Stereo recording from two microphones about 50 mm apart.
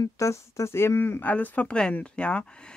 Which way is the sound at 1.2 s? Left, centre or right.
Left.